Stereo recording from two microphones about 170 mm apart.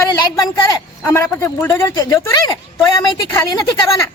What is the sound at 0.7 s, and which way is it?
Speech, 15° left (ahead or behind).